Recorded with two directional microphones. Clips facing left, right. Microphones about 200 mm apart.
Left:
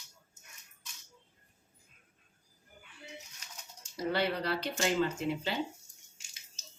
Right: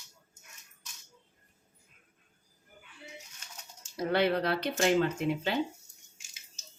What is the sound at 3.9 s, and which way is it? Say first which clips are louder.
Speech: right 4 dB; 55° right (ahead or behind).